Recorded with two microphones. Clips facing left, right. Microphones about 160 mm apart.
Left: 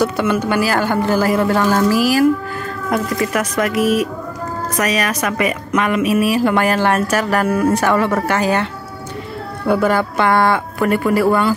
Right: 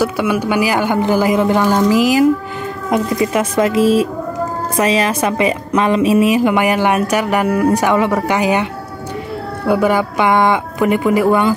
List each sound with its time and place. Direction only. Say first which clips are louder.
0.0 s a woman's voice: right 1 dB; 10° right (ahead or behind)
9.7 s a woman's voice: right 1 dB; 10° right (ahead or behind)